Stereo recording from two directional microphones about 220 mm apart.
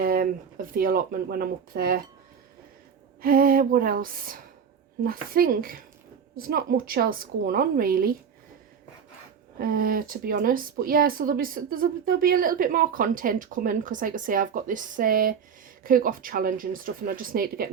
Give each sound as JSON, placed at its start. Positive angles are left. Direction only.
{"t": 0.0, "sound": "a woman's voice", "side_deg": -40}
{"t": 3.2, "sound": "a woman's voice", "side_deg": -40}
{"t": 9.6, "sound": "a woman's voice", "side_deg": -40}